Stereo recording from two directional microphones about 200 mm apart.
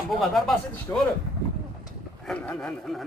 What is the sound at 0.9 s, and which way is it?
Speech, 15° left (ahead or behind).